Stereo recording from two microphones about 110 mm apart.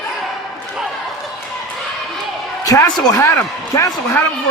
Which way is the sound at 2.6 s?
30° left (ahead or behind).